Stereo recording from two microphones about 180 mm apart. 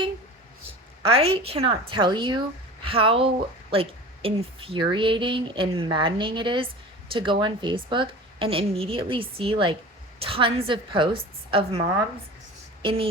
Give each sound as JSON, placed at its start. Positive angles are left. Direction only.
{"t": 1.0, "sound": "a woman's voice", "side_deg": -30}